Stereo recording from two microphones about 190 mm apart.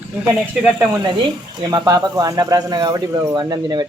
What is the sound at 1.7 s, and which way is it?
Speech, 20° right (ahead or behind).